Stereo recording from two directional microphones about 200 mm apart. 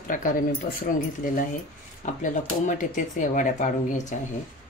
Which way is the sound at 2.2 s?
40° left (ahead or behind).